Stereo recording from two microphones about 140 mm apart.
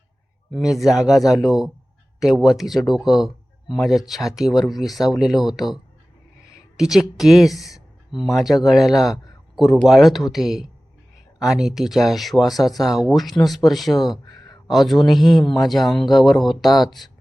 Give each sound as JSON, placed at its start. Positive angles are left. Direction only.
{"t": 0.5, "sound": "a man's voice", "side_deg": 0}
{"t": 6.7, "sound": "a man's voice", "side_deg": -5}
{"t": 14.3, "sound": "a sound", "side_deg": 25}
{"t": 14.7, "sound": "a man's voice", "side_deg": 0}